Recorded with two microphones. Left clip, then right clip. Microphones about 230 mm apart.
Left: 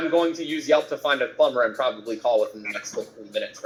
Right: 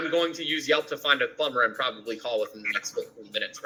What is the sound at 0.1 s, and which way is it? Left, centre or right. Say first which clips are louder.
A man's voice: left 3 dB; centre.